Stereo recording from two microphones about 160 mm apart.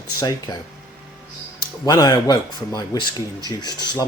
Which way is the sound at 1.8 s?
25° left (ahead or behind).